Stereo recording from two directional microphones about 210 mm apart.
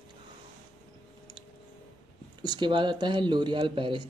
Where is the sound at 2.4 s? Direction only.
20° right (ahead or behind).